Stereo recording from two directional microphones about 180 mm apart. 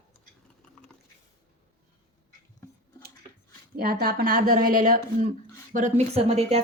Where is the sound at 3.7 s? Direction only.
55° right (ahead or behind).